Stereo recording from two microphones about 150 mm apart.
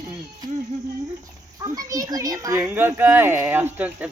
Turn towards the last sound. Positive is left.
turn(degrees=-10)  # may be behind; listen again after turning